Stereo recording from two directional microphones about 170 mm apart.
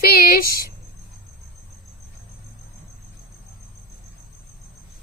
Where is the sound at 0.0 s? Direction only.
60° left (ahead or behind).